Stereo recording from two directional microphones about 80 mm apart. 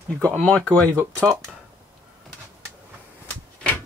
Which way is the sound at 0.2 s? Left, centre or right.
Centre.